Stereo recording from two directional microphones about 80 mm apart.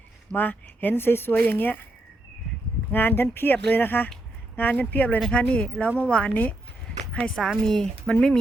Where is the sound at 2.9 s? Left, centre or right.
Left.